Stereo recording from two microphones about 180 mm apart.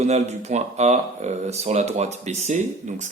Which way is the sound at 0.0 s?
40° right (ahead or behind).